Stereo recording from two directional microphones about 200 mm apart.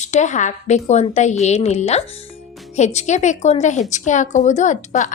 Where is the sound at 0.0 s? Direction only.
35° left (ahead or behind).